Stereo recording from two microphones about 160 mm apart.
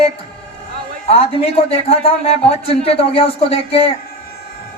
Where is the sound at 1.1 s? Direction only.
40° left (ahead or behind).